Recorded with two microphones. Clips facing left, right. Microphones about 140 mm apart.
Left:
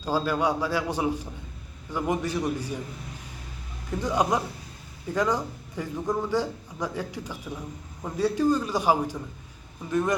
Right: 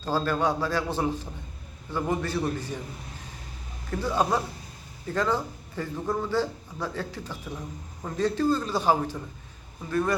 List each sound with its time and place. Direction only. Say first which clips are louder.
0.0 s a man's voice: even; 10° left (ahead or behind)
3.9 s a man's voice: left 1 dB; 15° left (ahead or behind)